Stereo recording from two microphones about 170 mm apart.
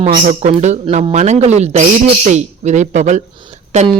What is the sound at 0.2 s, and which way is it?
A woman's voice, 45° right (ahead or behind).